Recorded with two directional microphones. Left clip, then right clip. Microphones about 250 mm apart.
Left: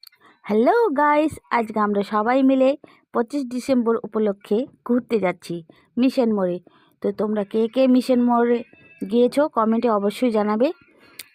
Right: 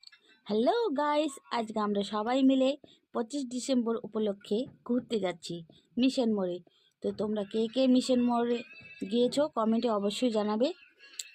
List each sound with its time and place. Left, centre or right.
0.0 s speech: left